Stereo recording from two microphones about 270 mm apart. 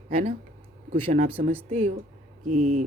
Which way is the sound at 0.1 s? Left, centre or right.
Right.